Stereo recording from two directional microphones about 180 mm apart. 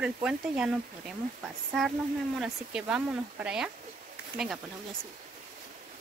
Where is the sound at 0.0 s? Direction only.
5° right (ahead or behind).